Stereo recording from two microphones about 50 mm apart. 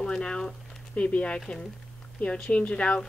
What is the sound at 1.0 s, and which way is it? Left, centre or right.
Speech, left.